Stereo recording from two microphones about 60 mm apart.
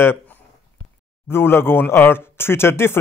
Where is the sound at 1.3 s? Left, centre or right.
Left.